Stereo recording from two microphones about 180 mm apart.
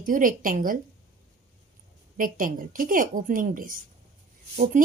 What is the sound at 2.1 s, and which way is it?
A woman's voice, 50° right (ahead or behind).